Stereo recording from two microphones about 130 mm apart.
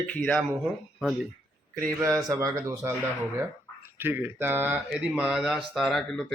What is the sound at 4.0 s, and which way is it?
Speech, 15° right (ahead or behind).